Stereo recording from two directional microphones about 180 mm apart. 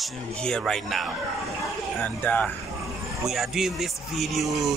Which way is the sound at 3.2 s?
Centre (ahead or behind).